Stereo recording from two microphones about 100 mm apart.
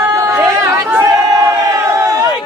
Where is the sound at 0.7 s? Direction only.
25° right (ahead or behind).